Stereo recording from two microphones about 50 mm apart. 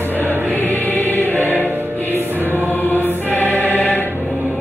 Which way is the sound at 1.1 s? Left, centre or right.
Left.